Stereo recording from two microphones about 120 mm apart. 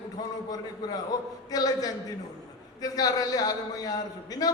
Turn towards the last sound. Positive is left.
turn(degrees=30)  # may be behind; listen again after turning